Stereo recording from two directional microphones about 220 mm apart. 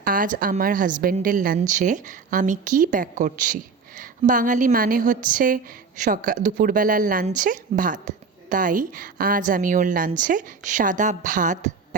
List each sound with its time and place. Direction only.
0.0 s speech: 40° right (ahead or behind)